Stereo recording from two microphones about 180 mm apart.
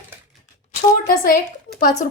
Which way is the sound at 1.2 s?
55° left (ahead or behind).